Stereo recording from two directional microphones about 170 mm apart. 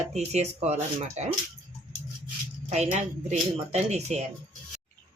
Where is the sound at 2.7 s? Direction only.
40° right (ahead or behind).